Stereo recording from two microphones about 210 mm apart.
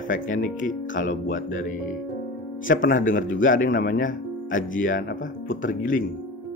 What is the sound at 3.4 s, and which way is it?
Speech, 40° left (ahead or behind).